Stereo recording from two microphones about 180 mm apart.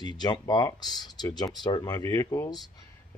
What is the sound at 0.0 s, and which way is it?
Speech, 25° left (ahead or behind).